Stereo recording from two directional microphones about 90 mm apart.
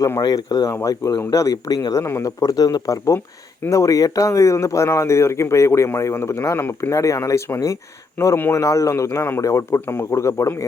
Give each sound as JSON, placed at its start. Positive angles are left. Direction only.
{"t": 0.2, "sound": "speech", "side_deg": 45}
{"t": 0.7, "sound": "speech", "side_deg": 30}
{"t": 8.5, "sound": "speech", "side_deg": 35}